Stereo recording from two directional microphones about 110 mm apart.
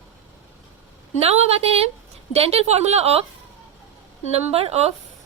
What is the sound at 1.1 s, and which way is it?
A woman's voice, 65° right (ahead or behind).